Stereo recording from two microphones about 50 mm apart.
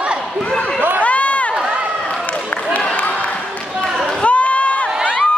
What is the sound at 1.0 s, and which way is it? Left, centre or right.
Run, left.